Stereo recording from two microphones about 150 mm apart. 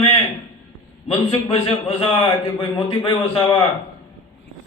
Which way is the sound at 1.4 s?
40° left (ahead or behind).